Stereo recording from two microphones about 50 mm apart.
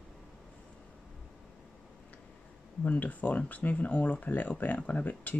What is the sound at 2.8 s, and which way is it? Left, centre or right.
Speech, left.